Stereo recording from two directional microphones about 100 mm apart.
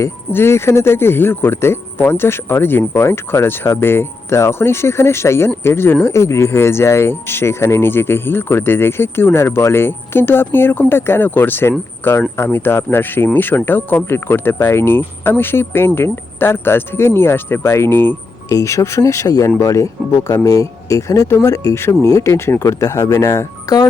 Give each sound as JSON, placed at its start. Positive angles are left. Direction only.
{"t": 0.0, "sound": "speech", "side_deg": 25}